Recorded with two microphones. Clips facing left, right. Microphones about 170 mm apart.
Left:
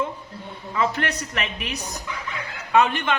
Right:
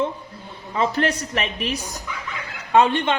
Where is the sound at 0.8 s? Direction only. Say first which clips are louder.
Right 3 dB; 30° right (ahead or behind).